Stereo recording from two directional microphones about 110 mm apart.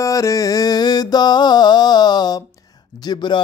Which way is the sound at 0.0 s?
30° left (ahead or behind).